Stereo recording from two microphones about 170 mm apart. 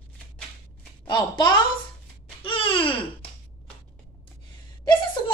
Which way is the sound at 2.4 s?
30° left (ahead or behind).